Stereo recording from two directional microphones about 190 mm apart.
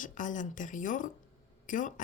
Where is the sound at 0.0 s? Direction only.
40° left (ahead or behind).